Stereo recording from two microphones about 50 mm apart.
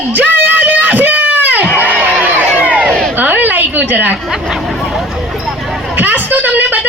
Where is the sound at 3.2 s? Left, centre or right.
Right.